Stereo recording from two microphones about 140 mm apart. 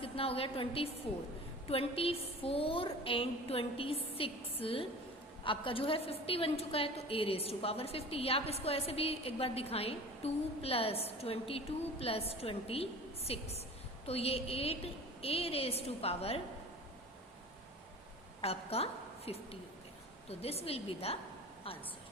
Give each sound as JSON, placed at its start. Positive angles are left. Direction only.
{"t": 0.0, "sound": "a woman's voice", "side_deg": 40}
{"t": 18.4, "sound": "a woman's voice", "side_deg": 45}